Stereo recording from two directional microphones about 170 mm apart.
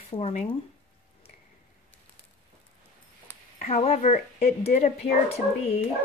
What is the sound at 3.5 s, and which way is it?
Speech, 40° left (ahead or behind).